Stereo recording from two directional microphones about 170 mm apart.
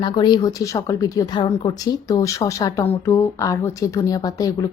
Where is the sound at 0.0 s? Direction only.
25° left (ahead or behind).